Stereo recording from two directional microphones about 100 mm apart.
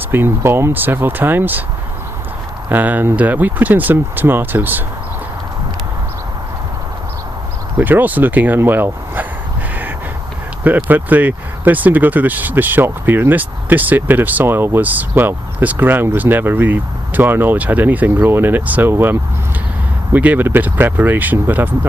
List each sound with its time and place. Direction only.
0.1 s speech: 20° right (ahead or behind)
2.6 s speech: 15° right (ahead or behind)
7.8 s speech: 20° right (ahead or behind)
10.6 s speech: 15° right (ahead or behind)